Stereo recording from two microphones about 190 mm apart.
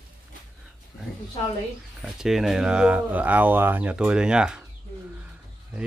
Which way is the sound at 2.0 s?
Centre (ahead or behind).